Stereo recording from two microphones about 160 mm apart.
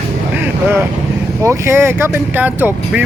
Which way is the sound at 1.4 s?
15° right (ahead or behind).